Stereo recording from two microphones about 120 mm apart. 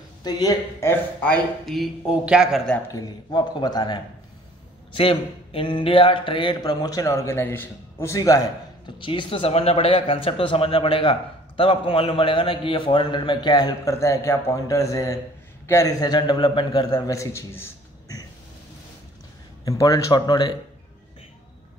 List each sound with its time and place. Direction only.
0.2 s speech: 35° left (ahead or behind)
0.8 s speech: 10° left (ahead or behind)
1.8 s a man's voice: 10° right (ahead or behind)
2.9 s speech: 35° left (ahead or behind)
4.9 s speech: 50° left (ahead or behind)
13.9 s a man's voice: 25° left (ahead or behind)
19.6 s speech: 30° left (ahead or behind)